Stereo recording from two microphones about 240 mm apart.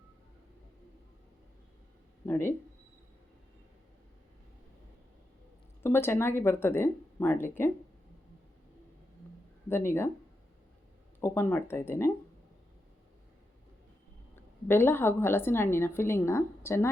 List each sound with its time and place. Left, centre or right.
2.2 s a woman's voice: centre
5.8 s a woman's voice: centre
9.6 s a woman's voice: centre
11.2 s a woman's voice: centre
14.3 s a woman's voice: centre